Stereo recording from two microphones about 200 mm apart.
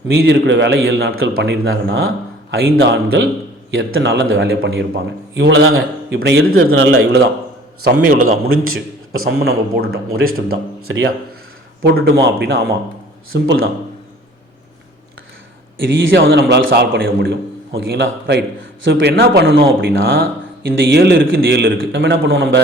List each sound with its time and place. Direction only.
0.1 s speech: 60° right (ahead or behind)
1.1 s speech: 85° right; by 3.2 s 55° right (ahead or behind)
3.7 s speech: 70° right (ahead or behind)
8.0 s a man's voice: 40° right (ahead or behind)
8.4 s a man's voice: 90° right
9.4 s a man's voice: 50° right (ahead or behind)
10.8 s speech: 70° right (ahead or behind)
13.3 s a man's voice: 85° right
16.0 s speech: 60° right (ahead or behind)
16.9 s a man's voice: 50° right (ahead or behind)